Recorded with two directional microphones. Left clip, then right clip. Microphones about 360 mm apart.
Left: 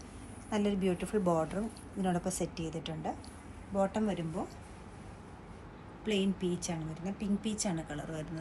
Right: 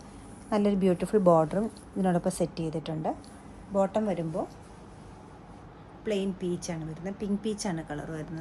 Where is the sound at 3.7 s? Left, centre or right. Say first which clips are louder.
Right 6 dB; right.